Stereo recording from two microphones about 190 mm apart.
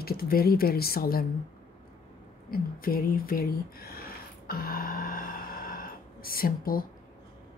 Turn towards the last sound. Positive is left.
turn(degrees=50)  # may be behind; listen again after turning